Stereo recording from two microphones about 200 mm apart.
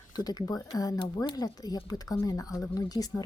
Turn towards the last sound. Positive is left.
turn(degrees=20)  # may be behind; listen again after turning